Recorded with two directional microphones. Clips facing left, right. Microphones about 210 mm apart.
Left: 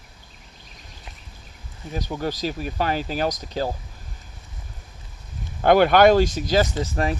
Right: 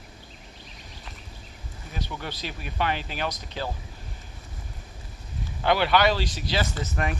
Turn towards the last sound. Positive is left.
turn(degrees=30)  # may be behind; listen again after turning